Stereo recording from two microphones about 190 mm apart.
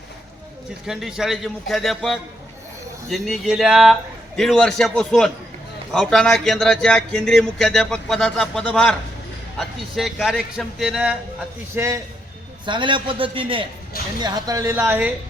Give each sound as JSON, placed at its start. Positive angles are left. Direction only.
{"t": 0.9, "sound": "speech", "side_deg": 0}
{"t": 12.6, "sound": "a man's voice", "side_deg": -25}